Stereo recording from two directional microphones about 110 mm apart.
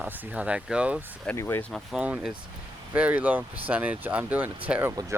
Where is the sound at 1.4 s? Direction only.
20° left (ahead or behind).